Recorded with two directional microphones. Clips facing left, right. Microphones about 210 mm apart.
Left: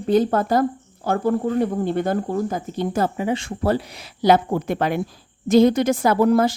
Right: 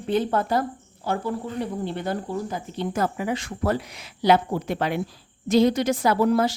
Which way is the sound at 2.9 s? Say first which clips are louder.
Left 3 dB; 30° left (ahead or behind).